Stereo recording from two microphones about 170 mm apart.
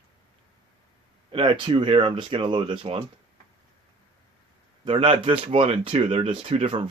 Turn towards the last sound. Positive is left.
turn(degrees=-30)  # may be behind; listen again after turning